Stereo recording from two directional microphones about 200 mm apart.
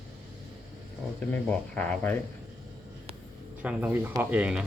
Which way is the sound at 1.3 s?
5° left (ahead or behind).